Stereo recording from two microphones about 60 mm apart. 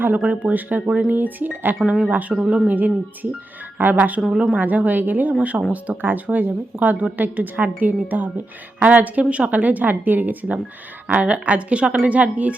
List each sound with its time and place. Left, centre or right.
0.0 s speech: right
2.3 s speech: centre
2.6 s speech: right
4.3 s speech: centre
4.6 s speech: right